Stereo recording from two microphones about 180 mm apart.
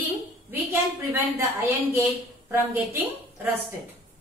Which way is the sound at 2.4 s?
10° right (ahead or behind).